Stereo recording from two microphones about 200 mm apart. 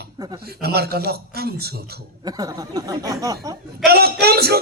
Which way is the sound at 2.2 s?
20° right (ahead or behind).